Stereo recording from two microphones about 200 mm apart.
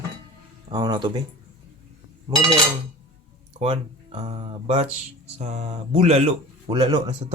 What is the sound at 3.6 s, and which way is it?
Speech, 30° right (ahead or behind).